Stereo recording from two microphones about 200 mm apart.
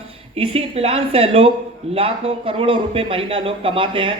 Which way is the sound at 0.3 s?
30° right (ahead or behind).